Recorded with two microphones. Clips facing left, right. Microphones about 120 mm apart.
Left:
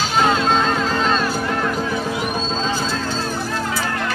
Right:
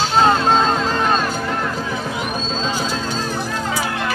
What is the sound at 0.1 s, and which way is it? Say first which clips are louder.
Music: right 2 dB; 35° right (ahead or behind).